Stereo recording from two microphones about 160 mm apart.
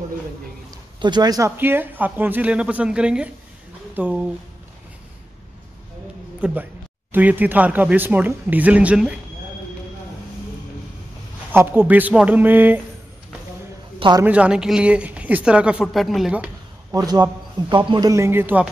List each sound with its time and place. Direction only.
1.0 s a man's voice: 25° right (ahead or behind)
1.6 s speech: 10° right (ahead or behind)
6.4 s speech: 10° right (ahead or behind)
11.5 s speech: 15° right (ahead or behind)
13.9 s a woman's voice: 30° right (ahead or behind)
14.2 s speech: 10° right (ahead or behind)
16.9 s a man's voice: 25° right (ahead or behind)